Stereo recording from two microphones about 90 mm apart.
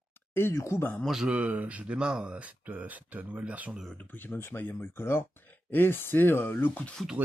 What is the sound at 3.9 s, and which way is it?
Speech, 20° left (ahead or behind).